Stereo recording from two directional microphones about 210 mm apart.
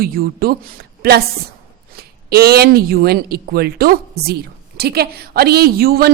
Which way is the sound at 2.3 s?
50° right (ahead or behind).